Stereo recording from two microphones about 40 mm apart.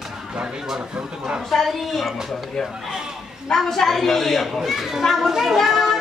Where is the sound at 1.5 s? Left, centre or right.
Centre.